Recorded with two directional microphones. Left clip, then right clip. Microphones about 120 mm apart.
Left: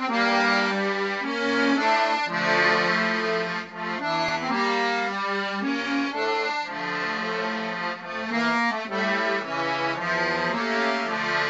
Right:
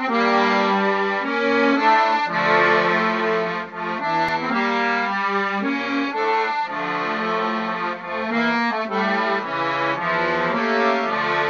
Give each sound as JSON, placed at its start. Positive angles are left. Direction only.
{"t": 0.1, "sound": "music", "side_deg": -10}
{"t": 1.6, "sound": "accordion", "side_deg": -15}
{"t": 8.4, "sound": "accordion", "side_deg": -10}
{"t": 10.7, "sound": "music", "side_deg": -15}